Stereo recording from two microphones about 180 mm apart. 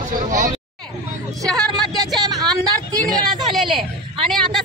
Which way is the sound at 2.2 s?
20° right (ahead or behind).